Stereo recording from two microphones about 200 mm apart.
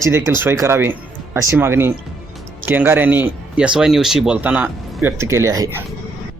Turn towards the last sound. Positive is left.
turn(degrees=-15)  # may be behind; listen again after turning